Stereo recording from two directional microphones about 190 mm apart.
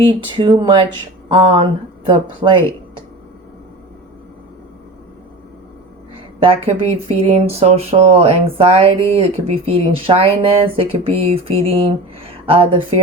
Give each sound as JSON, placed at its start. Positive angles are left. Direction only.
{"t": 0.3, "sound": "speech", "side_deg": -25}
{"t": 6.4, "sound": "speech", "side_deg": -30}